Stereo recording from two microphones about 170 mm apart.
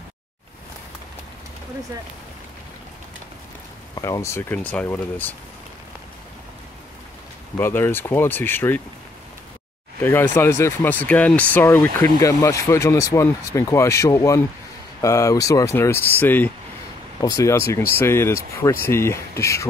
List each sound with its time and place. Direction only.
3.9 s speech: 20° left (ahead or behind)
7.5 s speech: 15° left (ahead or behind)
10.0 s speech: 15° left (ahead or behind)